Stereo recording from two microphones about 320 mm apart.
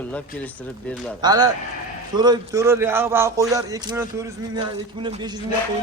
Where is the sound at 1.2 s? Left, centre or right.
Centre.